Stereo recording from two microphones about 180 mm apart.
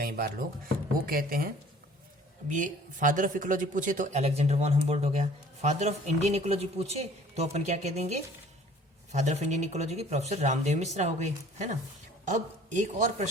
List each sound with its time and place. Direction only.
0.0 s speech: 55° right (ahead or behind)
2.5 s a man's voice: 45° right (ahead or behind)